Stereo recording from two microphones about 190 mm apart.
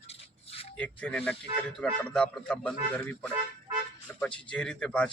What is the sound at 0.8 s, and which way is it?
A man's voice, 5° left (ahead or behind).